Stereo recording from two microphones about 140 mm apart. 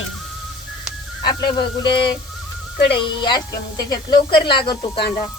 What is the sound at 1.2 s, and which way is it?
A woman's voice, 30° left (ahead or behind).